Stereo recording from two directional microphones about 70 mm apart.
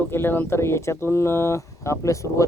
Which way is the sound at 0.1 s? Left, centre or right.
Left.